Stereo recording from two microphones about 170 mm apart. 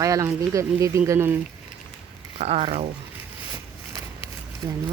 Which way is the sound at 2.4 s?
35° right (ahead or behind).